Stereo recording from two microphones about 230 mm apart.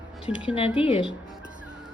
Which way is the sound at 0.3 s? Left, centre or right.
Centre.